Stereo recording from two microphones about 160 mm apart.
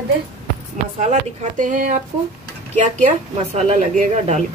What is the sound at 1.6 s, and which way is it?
Speech, 55° right (ahead or behind).